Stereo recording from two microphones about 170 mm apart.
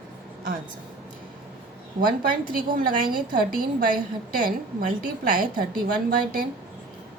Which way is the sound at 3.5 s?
55° right (ahead or behind).